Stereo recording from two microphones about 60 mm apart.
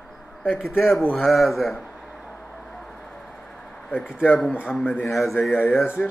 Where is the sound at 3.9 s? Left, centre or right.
Left.